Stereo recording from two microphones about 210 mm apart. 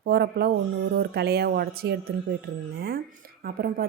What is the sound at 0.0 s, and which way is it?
A woman's voice, 50° right (ahead or behind).